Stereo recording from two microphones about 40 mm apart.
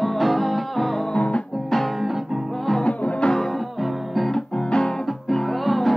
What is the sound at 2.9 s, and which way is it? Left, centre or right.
Music, left.